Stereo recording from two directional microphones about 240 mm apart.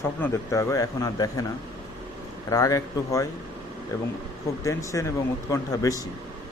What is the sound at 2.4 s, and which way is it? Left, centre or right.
Speech, centre.